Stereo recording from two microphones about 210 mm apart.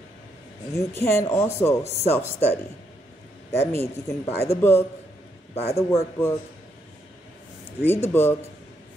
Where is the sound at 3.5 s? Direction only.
10° left (ahead or behind).